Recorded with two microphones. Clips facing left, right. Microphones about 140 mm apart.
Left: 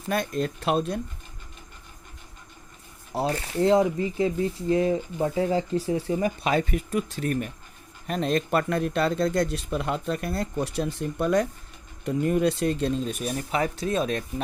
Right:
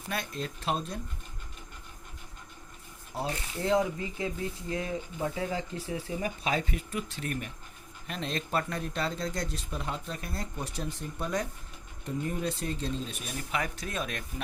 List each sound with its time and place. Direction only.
0.1 s speech: 50° left (ahead or behind); by 0.9 s 70° left (ahead or behind)
3.2 s speech: 70° left (ahead or behind)
6.9 s speech: 40° left (ahead or behind)
8.4 s speech: 65° left (ahead or behind)
13.1 s speech: 45° left (ahead or behind)